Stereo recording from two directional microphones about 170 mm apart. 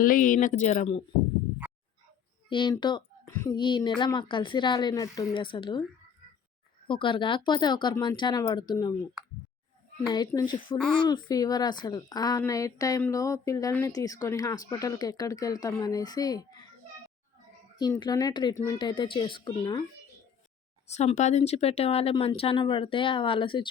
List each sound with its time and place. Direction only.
0.0 s speech: 55° left (ahead or behind); by 1.0 s 40° left (ahead or behind)
2.5 s speech: 30° left (ahead or behind)
3.2 s a sound: 15° left (ahead or behind)
3.6 s speech: 30° left (ahead or behind)
6.8 s speech: 30° left (ahead or behind)
10.1 s speech: 25° left (ahead or behind)
10.8 s speech: 5° left (ahead or behind)
11.0 s speech: 25° left (ahead or behind)
18.0 s speech: 20° left (ahead or behind)
20.9 s speech: 40° left (ahead or behind)